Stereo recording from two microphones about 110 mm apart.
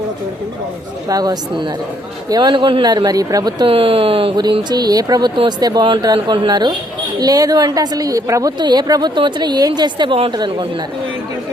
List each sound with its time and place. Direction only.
1.0 s a woman's voice: 35° right (ahead or behind)
2.9 s a woman's voice: 35° right (ahead or behind)
3.7 s speech: 55° right (ahead or behind)
4.7 s a woman's voice: 35° right (ahead or behind)